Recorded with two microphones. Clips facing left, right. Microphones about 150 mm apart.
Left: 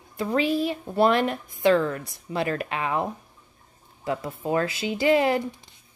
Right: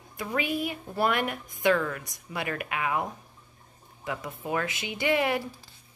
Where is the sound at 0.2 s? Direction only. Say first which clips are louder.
Left 6 dB; 30° left (ahead or behind).